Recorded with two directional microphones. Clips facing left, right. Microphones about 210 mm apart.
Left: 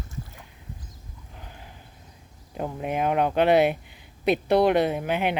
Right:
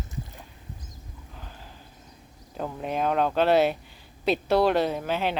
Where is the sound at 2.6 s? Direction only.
15° left (ahead or behind).